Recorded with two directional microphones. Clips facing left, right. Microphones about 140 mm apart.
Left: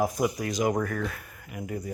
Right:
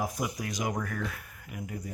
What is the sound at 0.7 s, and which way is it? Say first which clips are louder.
Speech: left 7 dB; 60° left (ahead or behind).